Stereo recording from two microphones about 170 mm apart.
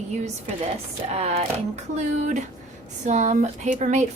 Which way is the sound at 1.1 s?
40° right (ahead or behind).